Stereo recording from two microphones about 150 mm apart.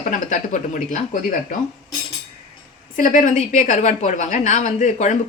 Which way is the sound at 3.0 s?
55° left (ahead or behind).